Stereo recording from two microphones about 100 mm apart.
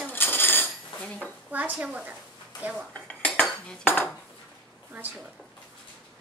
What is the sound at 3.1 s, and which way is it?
Cutlery, 15° left (ahead or behind).